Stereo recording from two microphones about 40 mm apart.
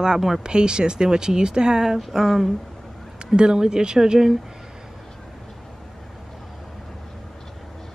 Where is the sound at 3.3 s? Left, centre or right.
Centre.